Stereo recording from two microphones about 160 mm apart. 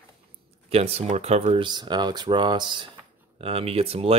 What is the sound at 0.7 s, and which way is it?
Speech, 40° right (ahead or behind).